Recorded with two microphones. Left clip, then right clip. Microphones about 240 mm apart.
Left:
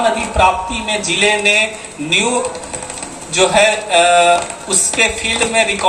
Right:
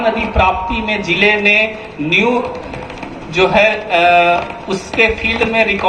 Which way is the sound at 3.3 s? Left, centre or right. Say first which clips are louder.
Even; left.